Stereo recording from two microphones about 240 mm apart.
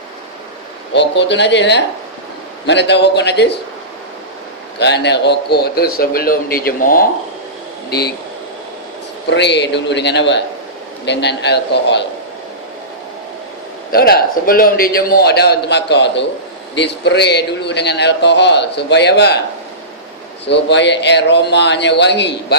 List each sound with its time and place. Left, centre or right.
0.9 s a man's voice: left
4.8 s a man's voice: left
9.3 s a man's voice: left
13.9 s a man's voice: left
20.4 s a man's voice: left